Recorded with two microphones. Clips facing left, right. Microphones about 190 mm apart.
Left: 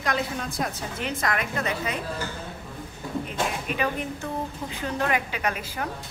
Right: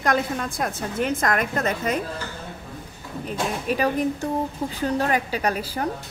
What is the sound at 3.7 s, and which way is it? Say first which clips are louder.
A woman's voice: right 6 dB; 40° right (ahead or behind).